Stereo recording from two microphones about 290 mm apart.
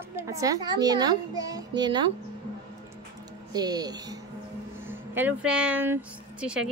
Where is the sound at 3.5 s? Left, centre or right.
Centre.